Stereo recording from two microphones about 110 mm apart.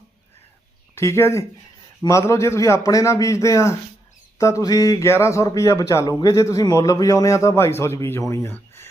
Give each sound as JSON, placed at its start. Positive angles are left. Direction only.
{"t": 0.9, "sound": "speech", "side_deg": 25}